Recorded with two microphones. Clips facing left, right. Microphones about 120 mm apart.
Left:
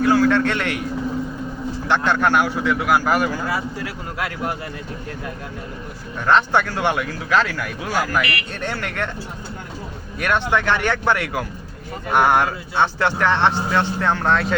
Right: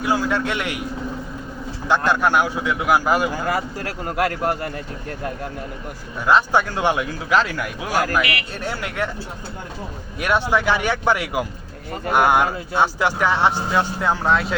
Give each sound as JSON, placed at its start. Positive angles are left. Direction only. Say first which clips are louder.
{"t": 0.0, "sound": "speech", "louder": "left 5 dB", "side_deg": -15}
{"t": 2.0, "sound": "speech", "louder": "left 1 dB", "side_deg": -15}
{"t": 3.4, "sound": "a man's voice", "louder": "right 1 dB", "side_deg": -45}
{"t": 6.2, "sound": "speech", "louder": "even", "side_deg": -10}
{"t": 10.2, "sound": "speech", "louder": "right 1 dB", "side_deg": -10}